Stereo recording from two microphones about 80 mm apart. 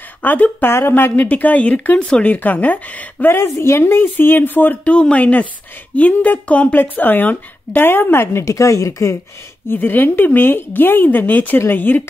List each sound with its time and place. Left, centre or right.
0.2 s speech: left
3.3 s speech: left
9.7 s speech: left